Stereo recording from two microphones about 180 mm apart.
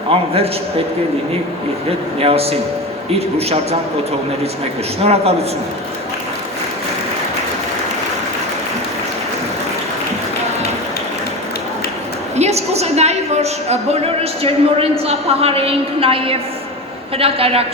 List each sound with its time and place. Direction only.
0.1 s a man's voice: 30° right (ahead or behind)
2.1 s a man's voice: 35° right (ahead or behind)
5.0 s a man's voice: 35° right (ahead or behind)
12.4 s a woman's voice: 35° right (ahead or behind)